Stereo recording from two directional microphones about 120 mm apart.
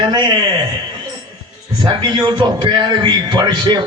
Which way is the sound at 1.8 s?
35° right (ahead or behind).